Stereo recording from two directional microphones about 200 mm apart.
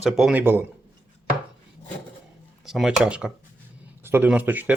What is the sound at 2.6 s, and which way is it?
Speech, centre (ahead or behind).